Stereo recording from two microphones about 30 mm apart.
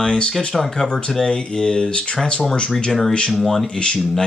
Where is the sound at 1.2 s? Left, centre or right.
Centre.